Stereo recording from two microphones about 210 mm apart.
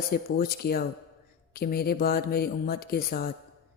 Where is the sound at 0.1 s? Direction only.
45° left (ahead or behind).